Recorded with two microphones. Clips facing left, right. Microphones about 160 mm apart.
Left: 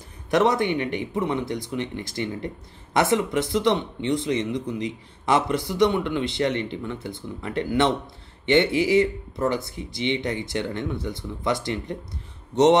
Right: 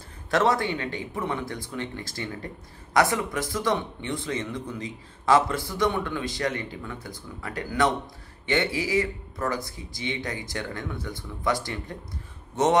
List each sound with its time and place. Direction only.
0.3 s speech: 20° left (ahead or behind)